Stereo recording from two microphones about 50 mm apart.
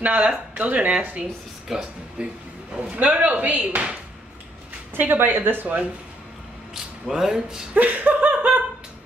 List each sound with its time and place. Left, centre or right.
0.0 s speech: right
4.9 s speech: right
6.7 s speech: centre
7.7 s laughter: right